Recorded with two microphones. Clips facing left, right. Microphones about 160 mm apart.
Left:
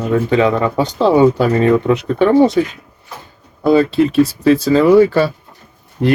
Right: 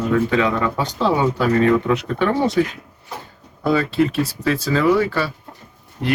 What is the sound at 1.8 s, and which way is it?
Speech, 25° left (ahead or behind).